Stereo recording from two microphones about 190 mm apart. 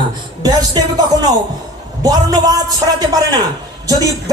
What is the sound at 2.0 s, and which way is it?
Speech, 20° right (ahead or behind).